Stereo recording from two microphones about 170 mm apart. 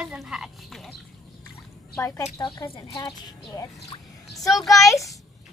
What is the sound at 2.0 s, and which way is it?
Speech, 15° left (ahead or behind).